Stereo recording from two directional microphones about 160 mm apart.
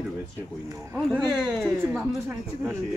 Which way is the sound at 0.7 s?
20° right (ahead or behind).